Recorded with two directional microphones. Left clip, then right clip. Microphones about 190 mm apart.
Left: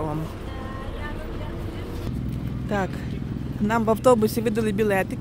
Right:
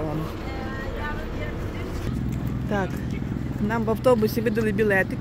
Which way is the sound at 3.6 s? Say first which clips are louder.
Left 3 dB; 20° left (ahead or behind).